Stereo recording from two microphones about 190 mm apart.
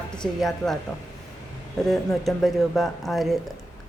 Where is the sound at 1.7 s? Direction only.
Centre (ahead or behind).